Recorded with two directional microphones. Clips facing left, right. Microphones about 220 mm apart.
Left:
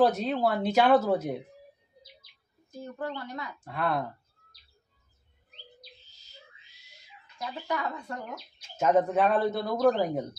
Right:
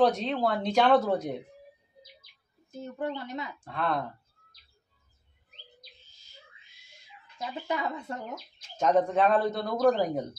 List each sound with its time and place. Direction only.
0.0 s a man's voice: 5° left (ahead or behind)
2.8 s speech: 20° right (ahead or behind)
3.5 s speech: 5° left (ahead or behind)
7.3 s speech: 20° right (ahead or behind)
8.5 s a man's voice: 10° left (ahead or behind)